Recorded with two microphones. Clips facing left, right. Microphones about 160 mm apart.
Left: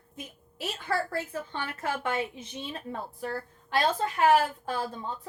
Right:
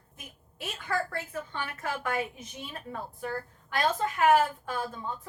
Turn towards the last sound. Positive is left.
turn(degrees=30)  # may be behind; listen again after turning